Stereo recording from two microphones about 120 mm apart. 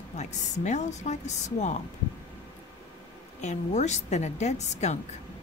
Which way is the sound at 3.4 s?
75° left (ahead or behind).